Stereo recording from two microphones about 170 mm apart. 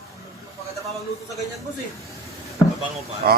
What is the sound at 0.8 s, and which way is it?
Speech, centre (ahead or behind).